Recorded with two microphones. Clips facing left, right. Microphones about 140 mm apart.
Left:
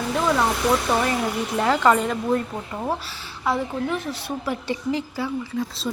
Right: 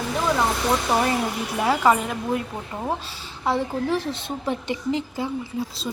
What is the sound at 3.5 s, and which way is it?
A woman's voice, 30° right (ahead or behind).